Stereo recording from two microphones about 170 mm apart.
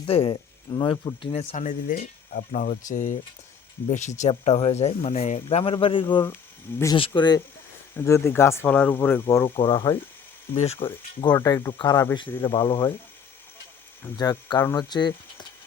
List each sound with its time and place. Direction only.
0.0 s speech: 30° left (ahead or behind)
1.4 s speech: 45° left (ahead or behind); by 10.0 s 15° left (ahead or behind)
10.5 s speech: 40° left (ahead or behind); by 12.9 s 20° left (ahead or behind)
14.0 s speech: 15° left (ahead or behind)